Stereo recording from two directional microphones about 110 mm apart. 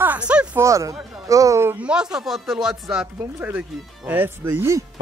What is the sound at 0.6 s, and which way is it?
Speech, 30° right (ahead or behind).